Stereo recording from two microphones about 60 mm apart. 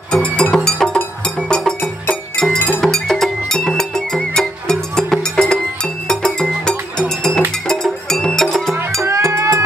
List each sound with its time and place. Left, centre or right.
0.1 s music: centre
2.8 s music: centre
9.0 s music: right